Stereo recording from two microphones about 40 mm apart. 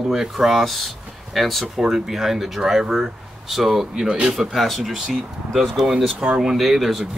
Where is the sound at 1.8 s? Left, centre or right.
Centre.